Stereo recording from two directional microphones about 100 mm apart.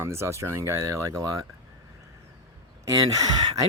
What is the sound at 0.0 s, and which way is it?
Speech, 25° right (ahead or behind).